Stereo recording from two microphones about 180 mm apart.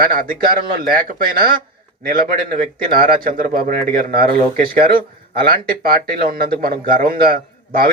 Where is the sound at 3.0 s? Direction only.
50° right (ahead or behind).